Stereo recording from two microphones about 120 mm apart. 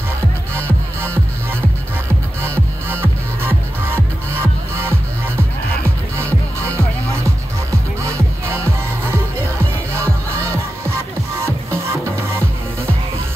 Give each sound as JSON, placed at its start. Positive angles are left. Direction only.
{"t": 3.0, "sound": "music", "side_deg": -20}
{"t": 8.0, "sound": "music", "side_deg": -25}
{"t": 9.9, "sound": "music", "side_deg": -20}